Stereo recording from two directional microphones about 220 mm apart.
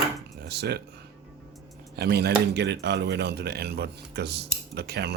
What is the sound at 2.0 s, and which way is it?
Speech, 45° right (ahead or behind).